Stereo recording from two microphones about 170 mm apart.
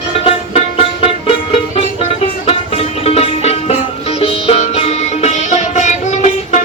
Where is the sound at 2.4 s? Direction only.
35° left (ahead or behind).